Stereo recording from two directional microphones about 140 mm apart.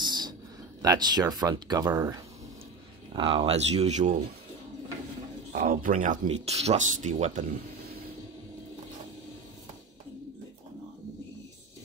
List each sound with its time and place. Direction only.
0.0 s a sound: 30° right (ahead or behind)
0.8 s speech: 30° right (ahead or behind)
3.1 s speech: 40° right (ahead or behind); by 4.2 s 60° right (ahead or behind)
5.5 s speech: 70° right (ahead or behind)